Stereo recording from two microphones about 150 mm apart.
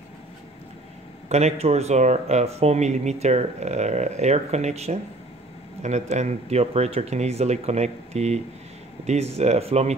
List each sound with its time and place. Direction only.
1.3 s speech: 45° right (ahead or behind)